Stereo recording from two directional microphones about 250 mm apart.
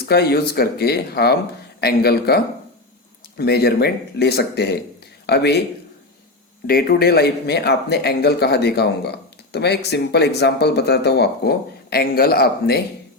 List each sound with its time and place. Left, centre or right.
0.0 s speech: left
6.7 s speech: left